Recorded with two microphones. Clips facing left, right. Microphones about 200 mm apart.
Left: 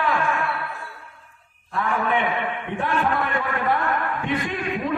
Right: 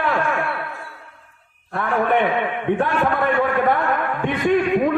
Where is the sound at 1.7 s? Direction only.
60° right (ahead or behind).